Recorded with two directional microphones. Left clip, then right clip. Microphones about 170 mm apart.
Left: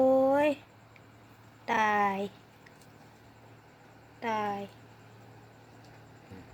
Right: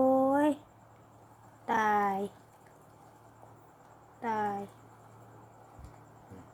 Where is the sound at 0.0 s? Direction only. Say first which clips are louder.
Left 2 dB; 20° right (ahead or behind).